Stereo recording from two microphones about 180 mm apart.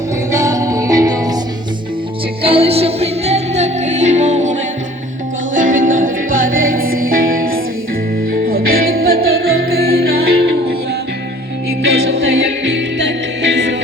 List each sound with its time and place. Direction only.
0.3 s music: 20° right (ahead or behind)
2.4 s music: 30° right (ahead or behind)
5.5 s music: 45° right (ahead or behind); by 10.8 s 65° right (ahead or behind)
12.6 s music: 80° right